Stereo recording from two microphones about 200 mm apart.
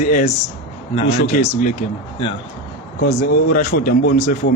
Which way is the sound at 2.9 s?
45° left (ahead or behind).